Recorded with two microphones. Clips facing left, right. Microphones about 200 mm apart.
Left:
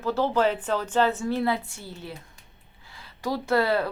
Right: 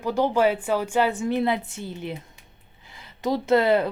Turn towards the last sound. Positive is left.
turn(degrees=-20)  # may be behind; listen again after turning